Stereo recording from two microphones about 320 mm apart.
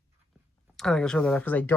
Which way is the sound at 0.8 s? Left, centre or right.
Centre.